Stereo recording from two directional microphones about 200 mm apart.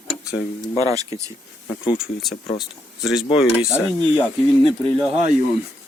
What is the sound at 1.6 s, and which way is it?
Speech, 25° left (ahead or behind).